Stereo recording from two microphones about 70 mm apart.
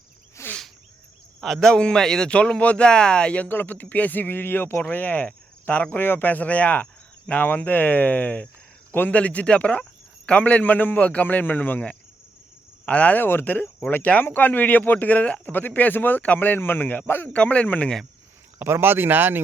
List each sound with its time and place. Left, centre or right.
0.4 s insect: left
1.4 s a man's voice: centre
1.7 s speech: centre
18.6 s speech: right